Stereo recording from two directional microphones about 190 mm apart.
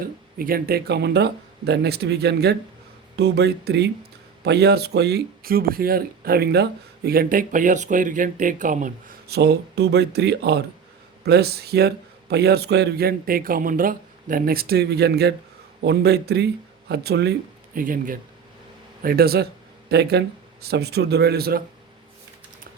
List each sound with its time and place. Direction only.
0.3 s a man's voice: 50° right (ahead or behind)
17.7 s a man's voice: 45° right (ahead or behind)